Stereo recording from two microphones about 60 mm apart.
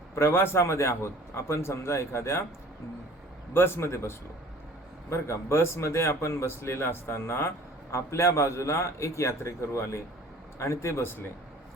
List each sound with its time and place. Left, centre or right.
0.2 s a man's voice: left
3.5 s a man's voice: left